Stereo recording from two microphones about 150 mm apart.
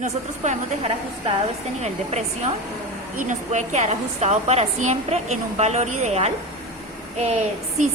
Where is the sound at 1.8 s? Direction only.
45° right (ahead or behind).